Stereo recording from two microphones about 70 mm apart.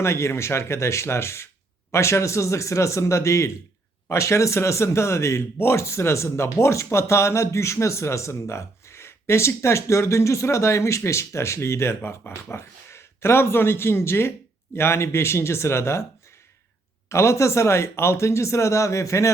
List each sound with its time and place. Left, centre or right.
0.0 s speech: left
17.1 s speech: left